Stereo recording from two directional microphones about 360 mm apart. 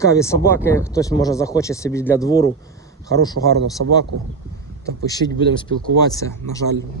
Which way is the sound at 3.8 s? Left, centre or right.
Right.